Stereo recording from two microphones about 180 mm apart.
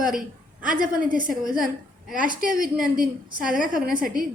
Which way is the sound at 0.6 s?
50° right (ahead or behind).